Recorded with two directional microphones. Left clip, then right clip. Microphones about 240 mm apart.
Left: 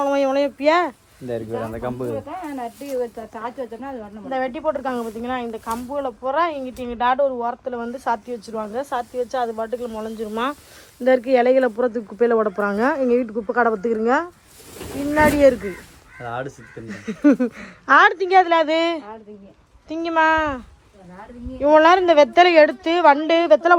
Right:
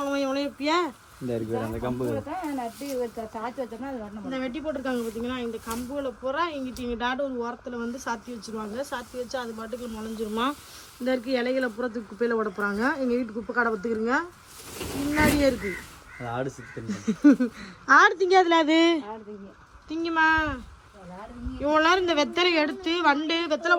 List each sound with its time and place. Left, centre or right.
0.0 s a sound: centre
1.3 s speech: right
2.7 s speech: centre
3.0 s speech: right
4.3 s speech: centre
16.2 s speech: right
16.8 s speech: right
17.2 s speech: centre; by 19.1 s right
19.9 s speech: centre